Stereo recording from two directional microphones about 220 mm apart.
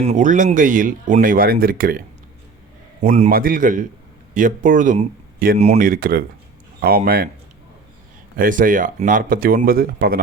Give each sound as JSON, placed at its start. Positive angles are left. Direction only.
{"t": 0.0, "sound": "speech", "side_deg": -35}
{"t": 3.0, "sound": "speech", "side_deg": -35}
{"t": 8.4, "sound": "speech", "side_deg": -40}